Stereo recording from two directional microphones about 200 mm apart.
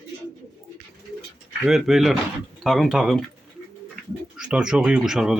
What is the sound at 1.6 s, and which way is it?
Speech, centre (ahead or behind).